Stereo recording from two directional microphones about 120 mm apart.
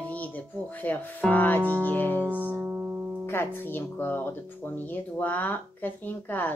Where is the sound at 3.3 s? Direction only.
20° left (ahead or behind).